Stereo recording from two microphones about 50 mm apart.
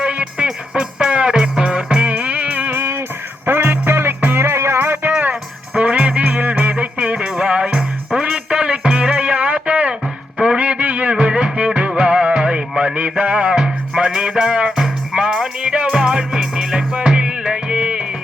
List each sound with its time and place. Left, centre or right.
0.0 s music: right
2.6 s music: right
4.4 s music: right
4.8 s music: right
5.3 s music: right
10.4 s a sound: right
11.2 s music: centre